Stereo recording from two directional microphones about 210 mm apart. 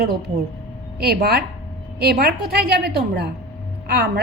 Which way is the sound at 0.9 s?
50° right (ahead or behind).